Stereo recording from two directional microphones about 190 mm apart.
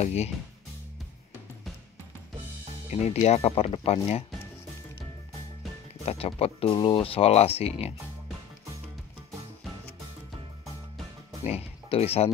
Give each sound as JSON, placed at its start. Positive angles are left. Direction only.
{"t": 0.0, "sound": "speech", "side_deg": 35}
{"t": 2.9, "sound": "speech", "side_deg": 35}
{"t": 6.0, "sound": "speech", "side_deg": 30}
{"t": 11.4, "sound": "speech", "side_deg": 35}